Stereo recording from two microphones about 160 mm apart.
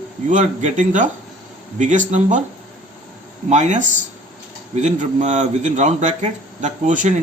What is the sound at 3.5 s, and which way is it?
Speech, 50° right (ahead or behind).